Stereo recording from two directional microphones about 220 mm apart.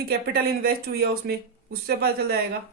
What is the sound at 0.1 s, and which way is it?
Speech, 45° right (ahead or behind).